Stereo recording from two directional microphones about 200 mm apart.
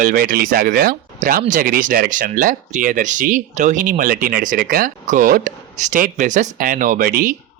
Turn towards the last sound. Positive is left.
turn(degrees=-45)  # may be behind; listen again after turning